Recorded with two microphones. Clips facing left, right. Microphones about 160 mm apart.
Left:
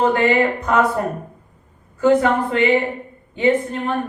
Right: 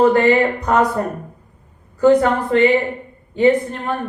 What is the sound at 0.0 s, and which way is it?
Speech, 40° right (ahead or behind).